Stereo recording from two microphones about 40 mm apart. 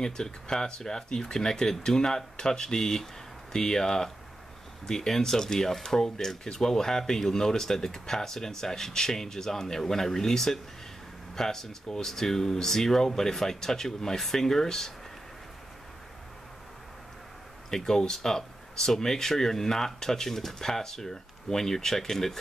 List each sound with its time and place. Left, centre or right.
0.0 s speech: centre
17.6 s speech: centre